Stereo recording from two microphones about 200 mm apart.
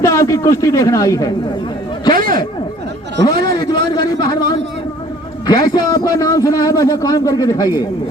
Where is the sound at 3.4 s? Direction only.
20° left (ahead or behind).